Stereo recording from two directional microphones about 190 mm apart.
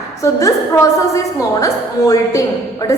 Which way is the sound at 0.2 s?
15° left (ahead or behind).